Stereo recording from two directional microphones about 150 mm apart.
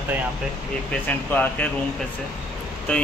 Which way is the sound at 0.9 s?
10° left (ahead or behind).